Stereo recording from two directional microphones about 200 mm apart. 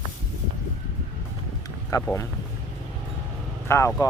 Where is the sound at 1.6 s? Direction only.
15° left (ahead or behind).